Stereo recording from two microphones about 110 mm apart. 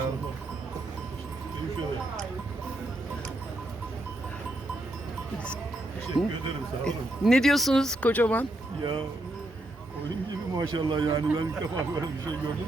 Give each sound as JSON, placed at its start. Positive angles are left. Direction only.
{"t": 6.2, "sound": "speech", "side_deg": 0}
{"t": 8.8, "sound": "speech", "side_deg": -50}
{"t": 10.5, "sound": "speech", "side_deg": -40}